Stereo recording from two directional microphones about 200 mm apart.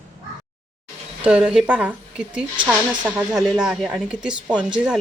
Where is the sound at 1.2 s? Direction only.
5° right (ahead or behind).